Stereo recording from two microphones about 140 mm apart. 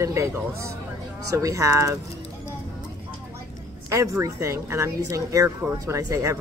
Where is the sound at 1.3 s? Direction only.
25° right (ahead or behind).